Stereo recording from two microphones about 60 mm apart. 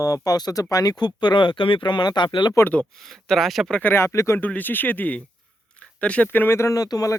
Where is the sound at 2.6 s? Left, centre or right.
Left.